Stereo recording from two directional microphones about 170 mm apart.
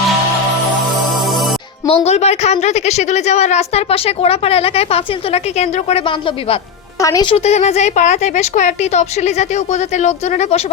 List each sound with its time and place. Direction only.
1.2 s music: centre (ahead or behind)
1.9 s a woman's voice: 40° left (ahead or behind)